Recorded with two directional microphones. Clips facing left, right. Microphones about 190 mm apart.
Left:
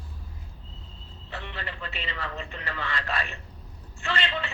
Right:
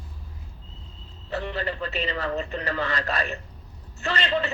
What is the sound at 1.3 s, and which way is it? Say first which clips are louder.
A man's voice: right 9 dB; 40° right (ahead or behind).